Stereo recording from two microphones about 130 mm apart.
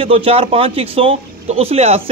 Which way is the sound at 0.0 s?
45° right (ahead or behind).